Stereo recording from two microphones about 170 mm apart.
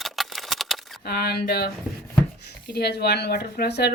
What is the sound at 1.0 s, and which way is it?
Speech, 65° left (ahead or behind).